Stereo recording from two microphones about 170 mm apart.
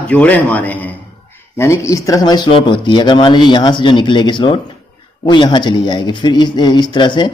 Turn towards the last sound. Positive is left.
turn(degrees=25)  # may be behind; listen again after turning